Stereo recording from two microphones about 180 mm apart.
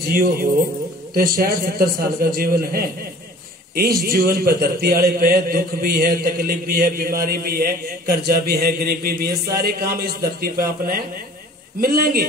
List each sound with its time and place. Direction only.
0.0 s a man's voice: 55° right (ahead or behind)
4.0 s a man's voice: 55° right (ahead or behind)